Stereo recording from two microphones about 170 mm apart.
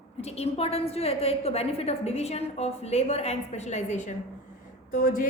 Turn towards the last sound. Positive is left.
turn(degrees=55)  # may be behind; listen again after turning